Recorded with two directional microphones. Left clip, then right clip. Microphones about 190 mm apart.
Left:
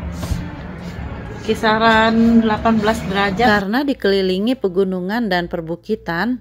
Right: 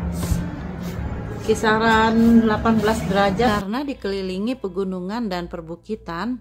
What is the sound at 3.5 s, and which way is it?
A woman's voice, 20° left (ahead or behind).